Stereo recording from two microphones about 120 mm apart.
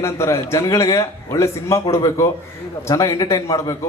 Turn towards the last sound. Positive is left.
turn(degrees=25)  # may be behind; listen again after turning